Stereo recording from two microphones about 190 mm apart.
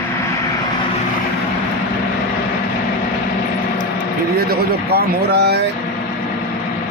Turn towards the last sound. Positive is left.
turn(degrees=-60)  # may be behind; listen again after turning